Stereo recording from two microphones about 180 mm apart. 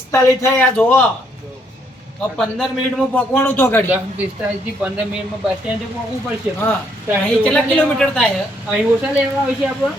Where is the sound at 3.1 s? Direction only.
10° left (ahead or behind).